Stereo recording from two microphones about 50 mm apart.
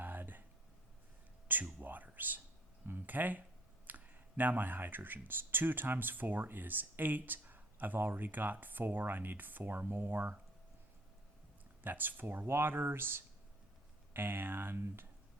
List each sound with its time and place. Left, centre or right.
0.0 s a sound: right
1.5 s speech: right
11.8 s speech: right